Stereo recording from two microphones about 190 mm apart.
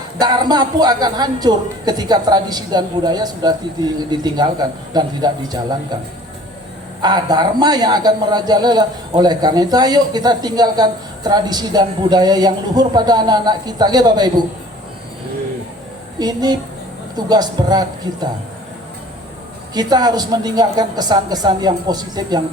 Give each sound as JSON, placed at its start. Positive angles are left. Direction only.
{"t": 0.2, "sound": "a man's voice", "side_deg": -20}
{"t": 7.0, "sound": "a man's voice", "side_deg": -20}
{"t": 16.1, "sound": "a woman's voice", "side_deg": -20}
{"t": 19.7, "sound": "a man's voice", "side_deg": -20}